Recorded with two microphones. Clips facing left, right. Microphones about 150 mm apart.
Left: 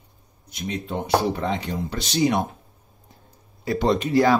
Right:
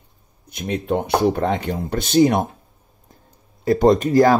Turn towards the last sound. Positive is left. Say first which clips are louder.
# right 5 dB
turn(degrees=-45)  # may be behind; listen again after turning